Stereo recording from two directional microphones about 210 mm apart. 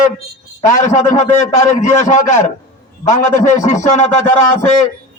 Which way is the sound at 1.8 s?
35° left (ahead or behind).